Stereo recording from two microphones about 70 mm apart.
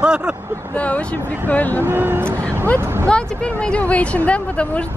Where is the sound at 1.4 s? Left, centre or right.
Left.